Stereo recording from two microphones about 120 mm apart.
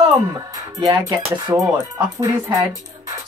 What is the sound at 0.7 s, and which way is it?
Speech, 30° right (ahead or behind).